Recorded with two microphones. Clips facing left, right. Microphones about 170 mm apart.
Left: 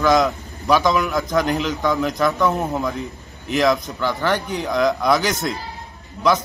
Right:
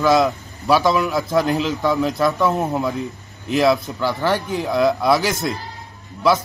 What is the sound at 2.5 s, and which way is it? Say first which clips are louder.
Speech: right 2 dB; 15° right (ahead or behind).